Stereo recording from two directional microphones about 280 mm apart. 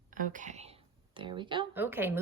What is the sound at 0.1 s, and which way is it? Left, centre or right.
A woman's voice, right.